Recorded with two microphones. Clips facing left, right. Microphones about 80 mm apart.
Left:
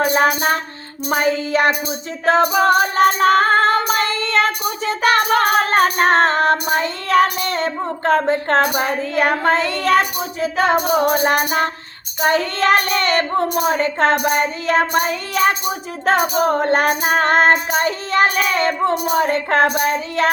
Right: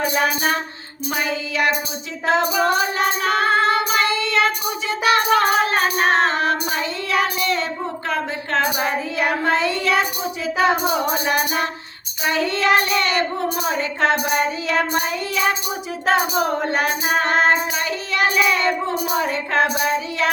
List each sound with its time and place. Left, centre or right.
0.0 s speech: left